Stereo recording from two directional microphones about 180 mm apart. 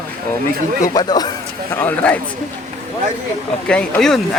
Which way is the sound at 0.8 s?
20° left (ahead or behind).